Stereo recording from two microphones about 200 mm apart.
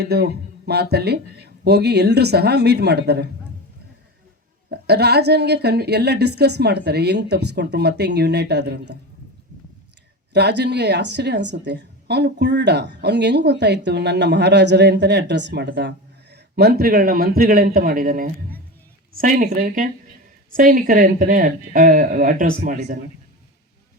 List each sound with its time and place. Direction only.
0.0 s a woman's voice: 55° right (ahead or behind)
4.7 s a woman's voice: 55° right (ahead or behind)
10.3 s a woman's voice: 55° right (ahead or behind)